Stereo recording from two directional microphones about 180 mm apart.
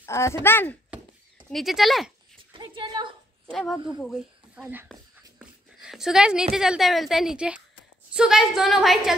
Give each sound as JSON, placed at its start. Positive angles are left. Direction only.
{"t": 0.0, "sound": "speech", "side_deg": 15}
{"t": 1.5, "sound": "a woman's voice", "side_deg": 0}
{"t": 2.5, "sound": "a woman's voice", "side_deg": -30}
{"t": 3.4, "sound": "a woman's voice", "side_deg": 0}